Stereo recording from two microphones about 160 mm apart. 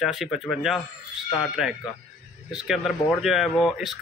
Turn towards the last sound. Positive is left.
turn(degrees=0)  # may be behind; listen again after turning